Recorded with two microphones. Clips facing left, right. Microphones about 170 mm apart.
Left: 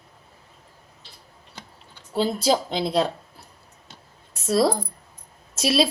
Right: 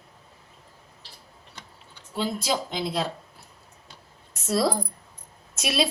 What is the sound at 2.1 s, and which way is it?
Speech, 35° left (ahead or behind).